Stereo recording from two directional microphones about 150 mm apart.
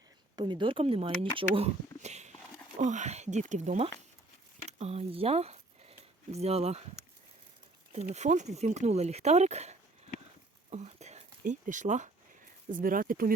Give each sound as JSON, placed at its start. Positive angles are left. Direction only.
{"t": 0.3, "sound": "speech", "side_deg": -30}
{"t": 8.1, "sound": "speech", "side_deg": -50}
{"t": 10.7, "sound": "a sound", "side_deg": -50}
{"t": 12.7, "sound": "speech", "side_deg": -65}